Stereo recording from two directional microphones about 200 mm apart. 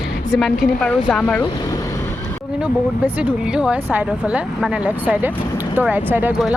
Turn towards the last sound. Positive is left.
turn(degrees=-5)  # may be behind; listen again after turning